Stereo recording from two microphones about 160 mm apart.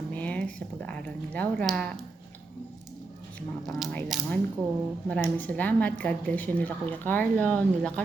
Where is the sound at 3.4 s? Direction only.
5° left (ahead or behind).